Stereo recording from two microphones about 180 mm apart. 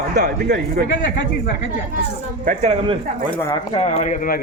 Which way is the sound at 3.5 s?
35° left (ahead or behind).